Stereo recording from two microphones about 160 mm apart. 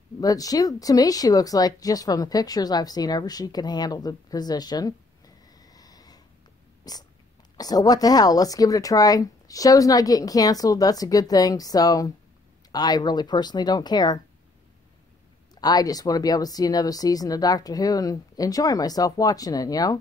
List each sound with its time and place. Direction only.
0.2 s speech: 20° left (ahead or behind)
6.8 s a sound: 25° left (ahead or behind)
7.5 s speech: 25° left (ahead or behind)
15.6 s speech: 25° left (ahead or behind)